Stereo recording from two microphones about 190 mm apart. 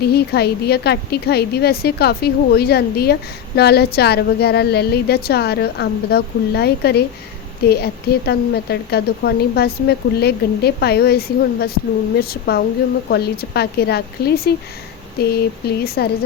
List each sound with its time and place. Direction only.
0.0 s a woman's voice: 55° left (ahead or behind)